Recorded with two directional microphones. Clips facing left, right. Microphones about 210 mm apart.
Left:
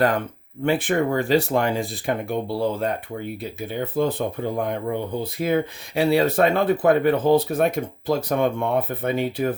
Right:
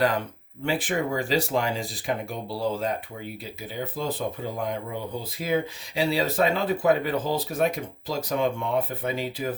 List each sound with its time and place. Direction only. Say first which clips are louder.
0.6 s speech: left 6 dB; 55° left (ahead or behind)